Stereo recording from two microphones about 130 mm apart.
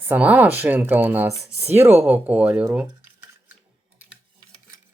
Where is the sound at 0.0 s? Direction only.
10° right (ahead or behind).